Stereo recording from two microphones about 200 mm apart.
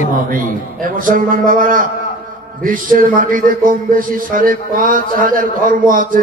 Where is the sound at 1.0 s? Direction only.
45° right (ahead or behind).